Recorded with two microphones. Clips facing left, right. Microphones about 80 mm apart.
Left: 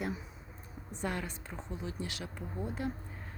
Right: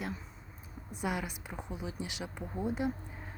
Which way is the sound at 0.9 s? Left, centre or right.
Centre.